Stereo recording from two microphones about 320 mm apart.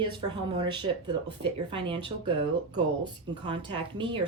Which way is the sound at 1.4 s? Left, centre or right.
Centre.